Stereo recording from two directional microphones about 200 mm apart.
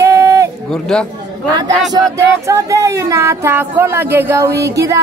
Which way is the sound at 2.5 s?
15° right (ahead or behind).